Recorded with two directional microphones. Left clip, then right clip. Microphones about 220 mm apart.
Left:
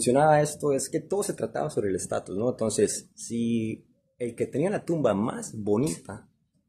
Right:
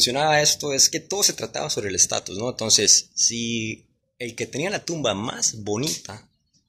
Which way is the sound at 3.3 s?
5° right (ahead or behind).